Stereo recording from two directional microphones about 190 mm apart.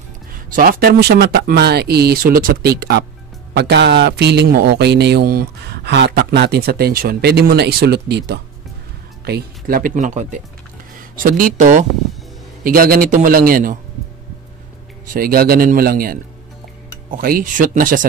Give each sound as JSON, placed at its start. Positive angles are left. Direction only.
{"t": 0.6, "sound": "a man's voice", "side_deg": -50}
{"t": 15.1, "sound": "speech", "side_deg": -50}
{"t": 17.2, "sound": "speech", "side_deg": -50}